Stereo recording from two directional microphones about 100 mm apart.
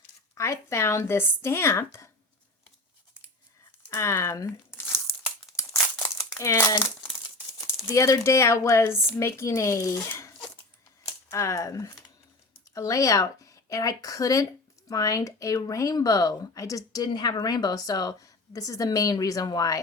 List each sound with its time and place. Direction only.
0.3 s speech: 30° left (ahead or behind)
3.8 s crumpling: 30° left (ahead or behind)
6.3 s speech: 30° left (ahead or behind)
7.9 s speech: 30° left (ahead or behind)